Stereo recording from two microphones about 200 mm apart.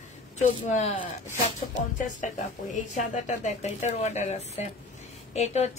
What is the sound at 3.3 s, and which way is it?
Speech, 35° left (ahead or behind).